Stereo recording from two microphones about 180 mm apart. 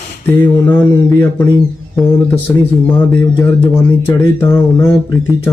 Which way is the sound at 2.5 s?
10° left (ahead or behind).